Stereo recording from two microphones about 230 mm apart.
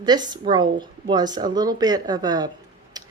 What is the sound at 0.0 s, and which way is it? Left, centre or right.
A woman's voice, centre.